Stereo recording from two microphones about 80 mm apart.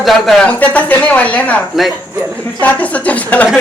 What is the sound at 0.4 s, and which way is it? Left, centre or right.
Speech, centre.